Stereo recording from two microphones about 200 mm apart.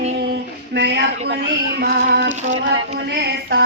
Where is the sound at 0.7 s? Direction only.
55° right (ahead or behind).